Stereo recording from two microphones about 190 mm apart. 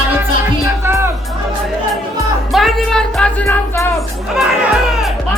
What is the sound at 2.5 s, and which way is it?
Music, centre (ahead or behind).